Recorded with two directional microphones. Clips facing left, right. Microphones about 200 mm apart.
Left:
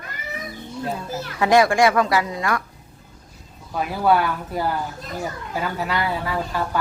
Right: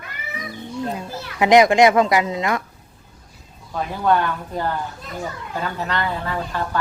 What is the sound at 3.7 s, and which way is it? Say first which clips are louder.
Speech: even; 5° left (ahead or behind).